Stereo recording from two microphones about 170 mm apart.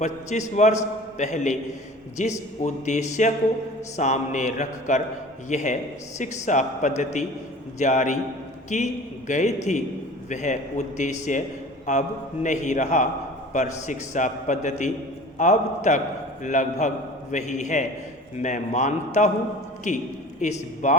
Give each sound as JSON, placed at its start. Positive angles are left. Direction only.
{"t": 0.0, "sound": "a man's voice", "side_deg": 45}